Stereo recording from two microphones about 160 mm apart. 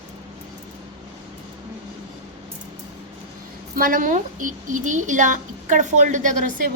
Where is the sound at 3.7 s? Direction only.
60° right (ahead or behind).